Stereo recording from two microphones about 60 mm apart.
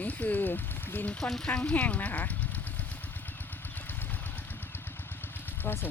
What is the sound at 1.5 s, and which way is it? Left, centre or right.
Speech, left.